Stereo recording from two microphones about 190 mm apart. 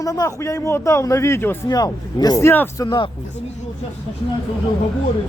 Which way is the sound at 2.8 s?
25° left (ahead or behind).